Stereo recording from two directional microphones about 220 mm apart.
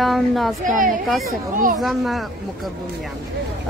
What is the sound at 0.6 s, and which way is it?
Speech, 40° right (ahead or behind).